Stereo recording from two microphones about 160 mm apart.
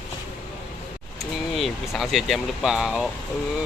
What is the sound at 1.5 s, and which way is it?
Speech, centre (ahead or behind).